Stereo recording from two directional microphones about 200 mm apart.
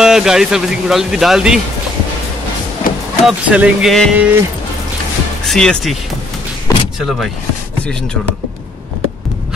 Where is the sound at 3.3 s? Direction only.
5° right (ahead or behind).